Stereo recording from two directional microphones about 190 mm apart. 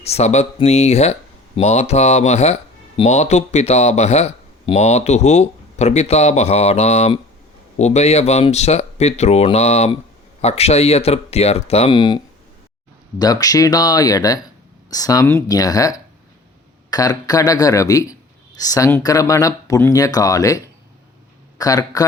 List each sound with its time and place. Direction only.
0.0 s a man's voice: 35° left (ahead or behind)